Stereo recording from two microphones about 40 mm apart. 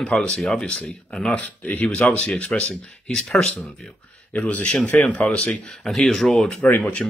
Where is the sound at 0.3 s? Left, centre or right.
Centre.